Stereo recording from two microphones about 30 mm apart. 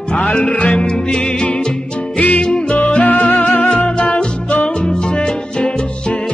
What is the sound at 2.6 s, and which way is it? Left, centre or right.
Music, left.